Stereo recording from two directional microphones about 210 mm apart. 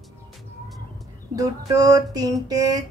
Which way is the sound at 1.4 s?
15° right (ahead or behind).